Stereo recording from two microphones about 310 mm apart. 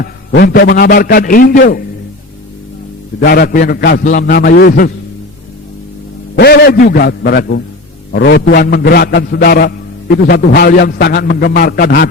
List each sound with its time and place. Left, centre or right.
0.0 s a man's voice: left
3.2 s a man's voice: left
6.3 s a man's voice: left